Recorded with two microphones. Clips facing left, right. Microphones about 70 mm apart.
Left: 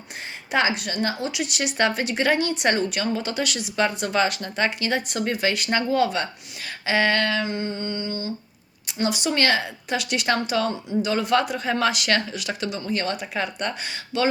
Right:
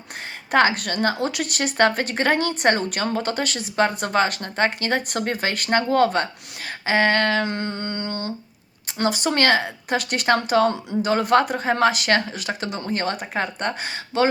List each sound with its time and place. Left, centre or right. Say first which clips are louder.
0.5 s a woman's voice: right 4 dB; right
9.0 s speech: right 3 dB; right